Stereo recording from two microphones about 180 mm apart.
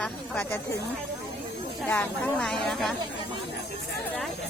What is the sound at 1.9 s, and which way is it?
A woman's voice, 10° left (ahead or behind).